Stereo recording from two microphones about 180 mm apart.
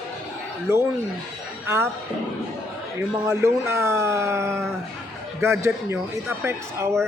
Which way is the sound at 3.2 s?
15° right (ahead or behind).